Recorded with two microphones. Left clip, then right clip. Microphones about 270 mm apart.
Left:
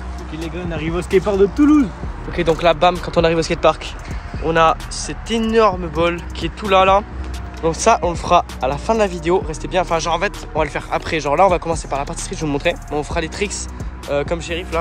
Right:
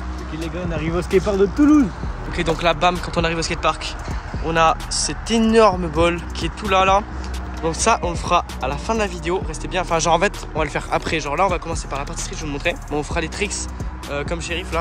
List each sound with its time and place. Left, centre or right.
0.4 s speech: centre